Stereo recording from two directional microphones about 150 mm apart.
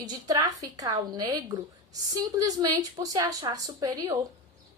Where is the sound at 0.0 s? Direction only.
25° right (ahead or behind).